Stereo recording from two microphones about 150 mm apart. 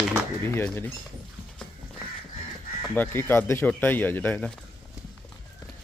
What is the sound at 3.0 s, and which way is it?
Speech, 15° left (ahead or behind).